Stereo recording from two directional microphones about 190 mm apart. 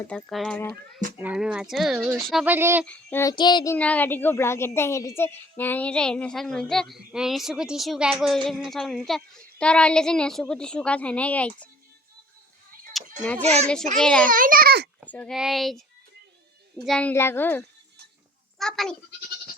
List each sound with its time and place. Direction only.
0.0 s a woman's voice: 5° left (ahead or behind)
1.2 s a woman's voice: 5° right (ahead or behind)
2.8 s child singing: 10° left (ahead or behind)
3.8 s a woman's voice: 5° left (ahead or behind)
13.5 s a woman's voice: 5° left (ahead or behind)
14.3 s a child's voice: 45° right (ahead or behind)
15.1 s a woman's voice: 5° left (ahead or behind)
16.8 s child singing: 5° left (ahead or behind)
18.6 s a woman's voice: 5° left (ahead or behind)